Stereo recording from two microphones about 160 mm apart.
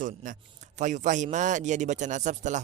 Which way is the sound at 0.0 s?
55° right (ahead or behind).